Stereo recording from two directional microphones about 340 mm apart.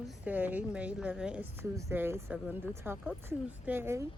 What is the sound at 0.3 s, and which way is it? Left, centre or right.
Speech, centre.